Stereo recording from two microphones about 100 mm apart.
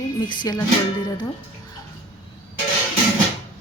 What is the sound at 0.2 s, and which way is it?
A woman's voice, 45° left (ahead or behind).